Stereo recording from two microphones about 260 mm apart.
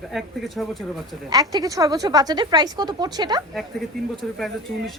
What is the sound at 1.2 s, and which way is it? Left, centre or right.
A woman's voice, centre.